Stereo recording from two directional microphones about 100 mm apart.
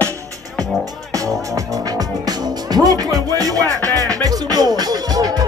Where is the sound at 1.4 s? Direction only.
35° right (ahead or behind).